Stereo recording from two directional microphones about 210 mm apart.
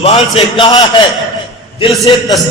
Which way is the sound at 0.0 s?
25° left (ahead or behind).